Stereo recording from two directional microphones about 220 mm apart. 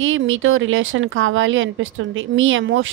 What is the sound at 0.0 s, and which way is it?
Speech, 60° right (ahead or behind).